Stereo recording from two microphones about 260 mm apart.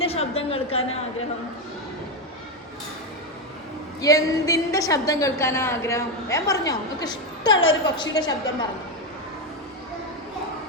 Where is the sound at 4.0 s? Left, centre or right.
Centre.